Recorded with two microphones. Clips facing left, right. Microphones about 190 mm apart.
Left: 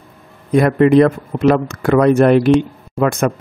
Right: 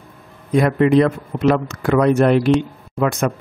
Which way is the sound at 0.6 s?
55° left (ahead or behind).